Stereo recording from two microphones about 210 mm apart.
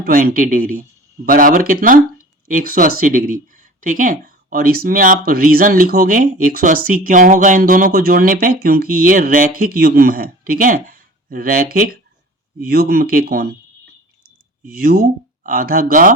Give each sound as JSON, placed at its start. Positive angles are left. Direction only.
{"t": 0.0, "sound": "speech", "side_deg": -45}
{"t": 14.7, "sound": "speech", "side_deg": -45}